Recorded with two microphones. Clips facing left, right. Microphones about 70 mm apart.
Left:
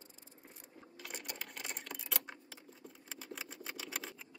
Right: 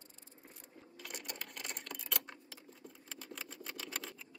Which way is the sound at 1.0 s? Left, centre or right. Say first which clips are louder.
Even; centre.